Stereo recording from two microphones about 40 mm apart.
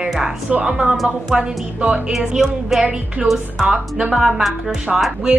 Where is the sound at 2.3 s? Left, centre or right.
Centre.